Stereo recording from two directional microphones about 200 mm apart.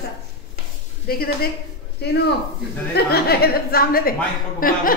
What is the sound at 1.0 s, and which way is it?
Speech, 50° left (ahead or behind).